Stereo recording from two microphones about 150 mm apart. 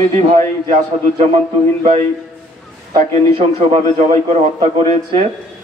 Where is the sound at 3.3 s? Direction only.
40° right (ahead or behind).